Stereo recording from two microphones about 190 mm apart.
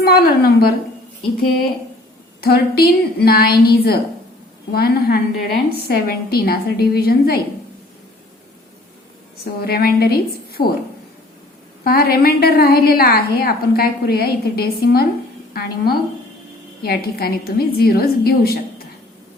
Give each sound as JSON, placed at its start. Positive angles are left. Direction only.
{"t": 0.0, "sound": "a woman's voice", "side_deg": 55}
{"t": 9.4, "sound": "a woman's voice", "side_deg": 55}
{"t": 11.8, "sound": "a woman's voice", "side_deg": 55}